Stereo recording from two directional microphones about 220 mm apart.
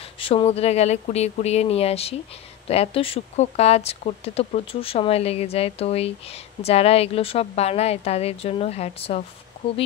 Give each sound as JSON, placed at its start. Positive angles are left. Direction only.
{"t": 0.2, "sound": "speech", "side_deg": 25}